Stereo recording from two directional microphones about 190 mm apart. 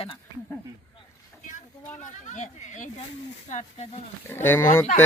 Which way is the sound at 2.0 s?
40° left (ahead or behind).